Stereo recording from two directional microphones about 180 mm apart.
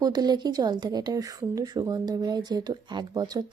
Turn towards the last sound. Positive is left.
turn(degrees=-20)  # may be behind; listen again after turning